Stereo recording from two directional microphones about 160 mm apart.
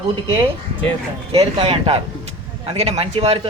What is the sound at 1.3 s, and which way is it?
Speech, 35° right (ahead or behind).